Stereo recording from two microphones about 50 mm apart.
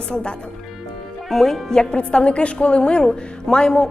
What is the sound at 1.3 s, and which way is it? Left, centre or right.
Speech, centre.